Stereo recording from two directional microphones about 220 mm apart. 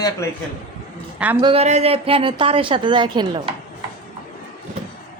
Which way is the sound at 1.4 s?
25° right (ahead or behind).